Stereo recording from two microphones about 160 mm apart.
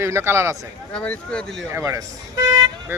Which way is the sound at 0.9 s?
5° left (ahead or behind).